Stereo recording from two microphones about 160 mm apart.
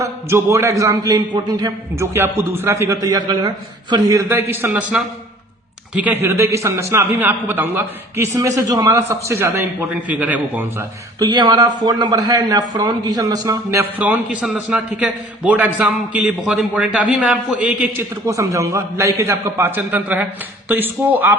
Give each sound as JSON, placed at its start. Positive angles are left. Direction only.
{"t": 0.0, "sound": "a man's voice", "side_deg": -15}
{"t": 11.2, "sound": "a man's voice", "side_deg": -25}
{"t": 18.3, "sound": "a man's voice", "side_deg": -20}